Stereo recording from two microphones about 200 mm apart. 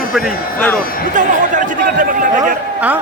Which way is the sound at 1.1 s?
40° right (ahead or behind).